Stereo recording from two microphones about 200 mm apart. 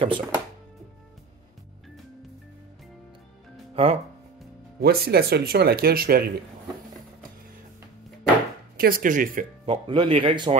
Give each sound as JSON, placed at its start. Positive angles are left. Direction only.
{"t": 0.0, "sound": "a man's voice", "side_deg": -25}
{"t": 3.7, "sound": "speech", "side_deg": -30}
{"t": 4.7, "sound": "speech", "side_deg": -50}
{"t": 8.7, "sound": "speech", "side_deg": -45}
{"t": 9.7, "sound": "a man's voice", "side_deg": -25}